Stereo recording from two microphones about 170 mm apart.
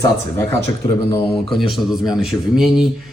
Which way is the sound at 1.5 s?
Centre (ahead or behind).